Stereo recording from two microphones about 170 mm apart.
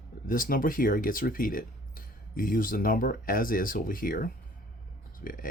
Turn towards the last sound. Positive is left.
turn(degrees=55)  # may be behind; listen again after turning